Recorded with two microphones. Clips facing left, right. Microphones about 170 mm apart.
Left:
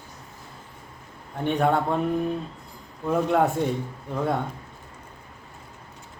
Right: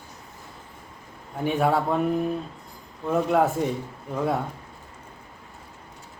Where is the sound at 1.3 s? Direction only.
5° right (ahead or behind).